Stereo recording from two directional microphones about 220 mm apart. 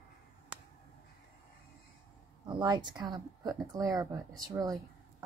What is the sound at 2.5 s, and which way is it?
A woman's voice, 20° right (ahead or behind).